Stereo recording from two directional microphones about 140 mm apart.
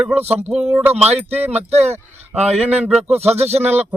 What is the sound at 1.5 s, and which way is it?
Speech, 50° right (ahead or behind).